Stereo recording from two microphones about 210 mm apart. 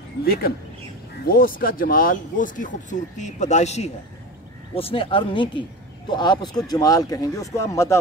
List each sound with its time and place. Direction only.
0.2 s speech: 45° left (ahead or behind); by 8.0 s 15° left (ahead or behind)